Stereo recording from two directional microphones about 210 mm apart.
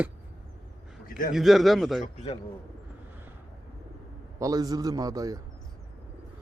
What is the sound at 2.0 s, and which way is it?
Speech, 30° left (ahead or behind).